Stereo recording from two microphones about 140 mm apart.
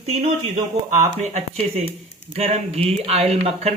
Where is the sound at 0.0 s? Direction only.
50° right (ahead or behind).